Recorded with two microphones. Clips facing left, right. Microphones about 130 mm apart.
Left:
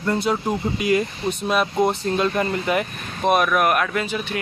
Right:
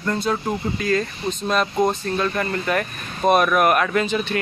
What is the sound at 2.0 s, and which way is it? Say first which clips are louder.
Speech: left 2 dB; 20° left (ahead or behind).